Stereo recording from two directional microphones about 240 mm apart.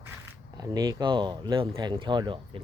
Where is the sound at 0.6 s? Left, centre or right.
Centre.